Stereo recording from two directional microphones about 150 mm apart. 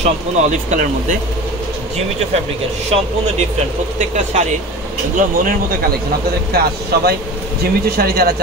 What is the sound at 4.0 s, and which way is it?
Speech, 50° right (ahead or behind).